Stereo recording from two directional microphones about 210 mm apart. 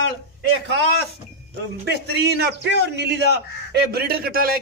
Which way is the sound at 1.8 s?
50° right (ahead or behind).